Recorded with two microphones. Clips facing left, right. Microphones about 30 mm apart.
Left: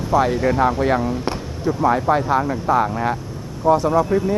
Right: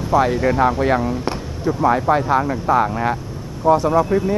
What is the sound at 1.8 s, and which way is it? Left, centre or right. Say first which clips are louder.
Speech: right 1 dB; centre.